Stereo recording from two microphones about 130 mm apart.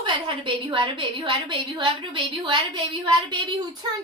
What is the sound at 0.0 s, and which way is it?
A woman's voice, 40° right (ahead or behind).